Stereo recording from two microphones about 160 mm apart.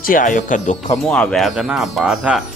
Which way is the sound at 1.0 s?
5° left (ahead or behind).